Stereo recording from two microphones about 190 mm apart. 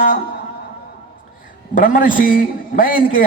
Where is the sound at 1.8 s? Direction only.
45° left (ahead or behind).